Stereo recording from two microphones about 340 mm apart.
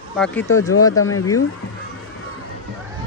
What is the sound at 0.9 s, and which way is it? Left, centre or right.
Speech, left.